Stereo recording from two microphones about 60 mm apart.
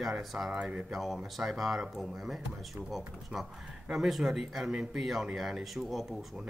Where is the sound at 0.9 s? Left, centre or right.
Centre.